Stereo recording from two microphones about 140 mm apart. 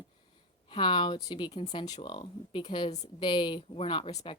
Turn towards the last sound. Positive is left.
turn(degrees=35)  # may be behind; listen again after turning